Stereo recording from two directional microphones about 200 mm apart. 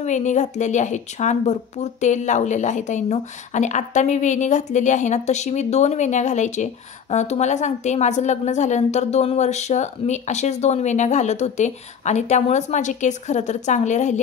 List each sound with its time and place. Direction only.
0.0 s a woman's voice: 35° left (ahead or behind)